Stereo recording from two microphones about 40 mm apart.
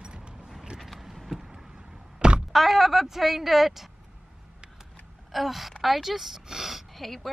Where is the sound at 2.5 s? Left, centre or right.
Centre.